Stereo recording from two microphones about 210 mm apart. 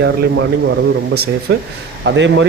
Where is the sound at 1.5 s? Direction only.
55° right (ahead or behind).